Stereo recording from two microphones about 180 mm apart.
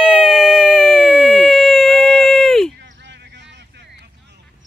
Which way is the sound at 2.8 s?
75° right (ahead or behind).